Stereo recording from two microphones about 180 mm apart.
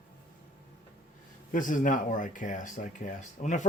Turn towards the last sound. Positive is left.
turn(degrees=45)  # may be behind; listen again after turning